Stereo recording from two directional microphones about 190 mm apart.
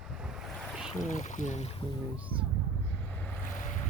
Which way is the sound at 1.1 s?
40° left (ahead or behind).